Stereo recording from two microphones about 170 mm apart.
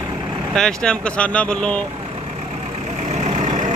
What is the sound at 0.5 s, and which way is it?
Speech, 5° left (ahead or behind).